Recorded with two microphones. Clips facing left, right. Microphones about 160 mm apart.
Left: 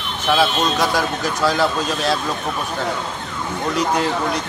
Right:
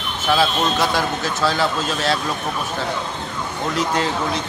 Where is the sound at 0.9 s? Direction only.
15° left (ahead or behind).